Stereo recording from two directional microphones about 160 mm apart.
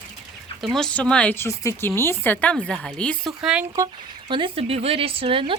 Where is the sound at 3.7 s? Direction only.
25° right (ahead or behind).